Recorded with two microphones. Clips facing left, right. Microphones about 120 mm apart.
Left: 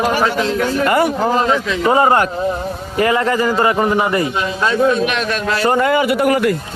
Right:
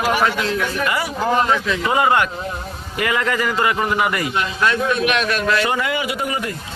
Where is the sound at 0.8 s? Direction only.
50° left (ahead or behind).